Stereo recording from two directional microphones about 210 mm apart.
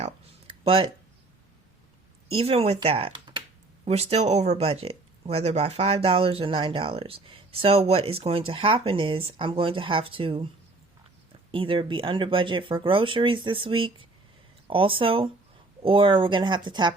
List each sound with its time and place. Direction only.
0.6 s speech: 25° right (ahead or behind)
2.3 s speech: 25° right (ahead or behind)
11.5 s speech: 25° right (ahead or behind)